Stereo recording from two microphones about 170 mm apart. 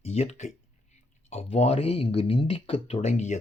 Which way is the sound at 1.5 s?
40° left (ahead or behind).